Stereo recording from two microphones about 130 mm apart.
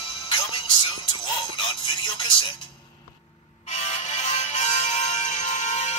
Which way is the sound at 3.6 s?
65° left (ahead or behind).